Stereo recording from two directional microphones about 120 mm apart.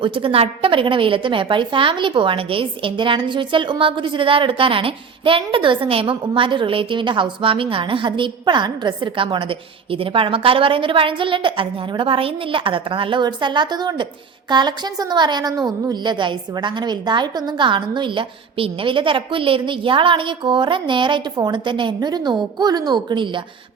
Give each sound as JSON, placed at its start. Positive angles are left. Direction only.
{"t": 0.0, "sound": "a woman's voice", "side_deg": -45}